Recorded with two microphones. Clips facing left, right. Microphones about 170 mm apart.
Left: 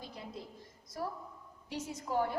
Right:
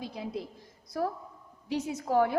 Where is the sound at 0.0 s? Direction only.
75° right (ahead or behind).